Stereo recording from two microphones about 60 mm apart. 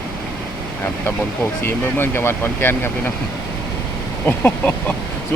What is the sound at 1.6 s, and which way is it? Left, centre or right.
Speech, left.